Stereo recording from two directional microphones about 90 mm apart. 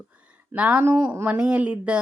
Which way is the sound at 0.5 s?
15° right (ahead or behind).